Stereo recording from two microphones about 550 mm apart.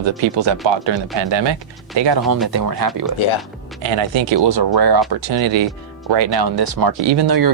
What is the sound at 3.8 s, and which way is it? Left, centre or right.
Speech, right.